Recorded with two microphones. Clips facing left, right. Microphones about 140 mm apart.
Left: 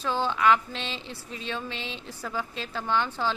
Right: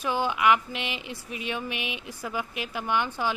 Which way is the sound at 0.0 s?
15° right (ahead or behind).